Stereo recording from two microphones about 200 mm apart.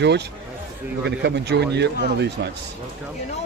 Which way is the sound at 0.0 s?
55° right (ahead or behind).